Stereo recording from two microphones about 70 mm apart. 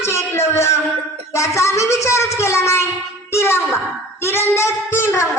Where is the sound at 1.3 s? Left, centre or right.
Left.